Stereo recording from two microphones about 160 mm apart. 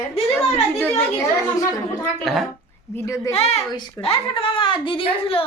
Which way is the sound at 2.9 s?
20° left (ahead or behind).